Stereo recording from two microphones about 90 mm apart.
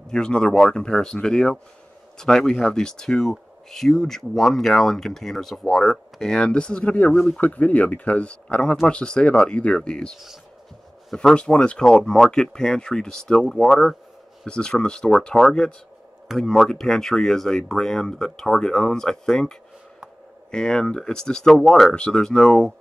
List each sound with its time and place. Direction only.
0.1 s speech: 10° left (ahead or behind)